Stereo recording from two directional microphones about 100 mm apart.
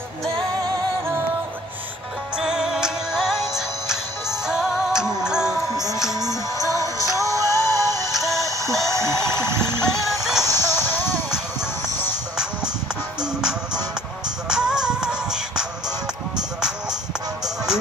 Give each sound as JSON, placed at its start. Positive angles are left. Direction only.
{"t": 2.3, "sound": "music", "side_deg": -5}
{"t": 7.1, "sound": "music", "side_deg": -35}
{"t": 8.1, "sound": "music", "side_deg": 0}
{"t": 8.5, "sound": "music", "side_deg": -30}
{"t": 9.8, "sound": "music", "side_deg": 0}
{"t": 10.4, "sound": "music", "side_deg": 25}
{"t": 13.2, "sound": "music", "side_deg": -5}